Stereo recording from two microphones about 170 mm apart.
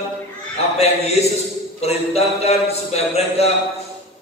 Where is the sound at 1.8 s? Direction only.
40° left (ahead or behind).